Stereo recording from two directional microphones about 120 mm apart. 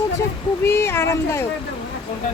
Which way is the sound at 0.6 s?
20° left (ahead or behind).